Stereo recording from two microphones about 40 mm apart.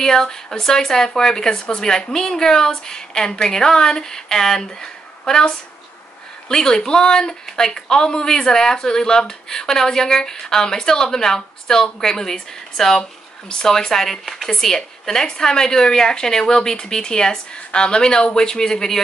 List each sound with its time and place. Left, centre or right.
0.0 s speech: centre
6.5 s speech: centre